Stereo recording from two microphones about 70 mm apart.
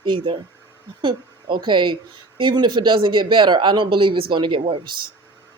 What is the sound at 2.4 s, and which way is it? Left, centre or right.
Speech, right.